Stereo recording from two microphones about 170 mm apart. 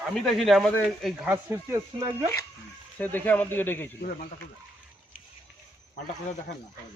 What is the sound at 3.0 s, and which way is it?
Speech, 10° left (ahead or behind).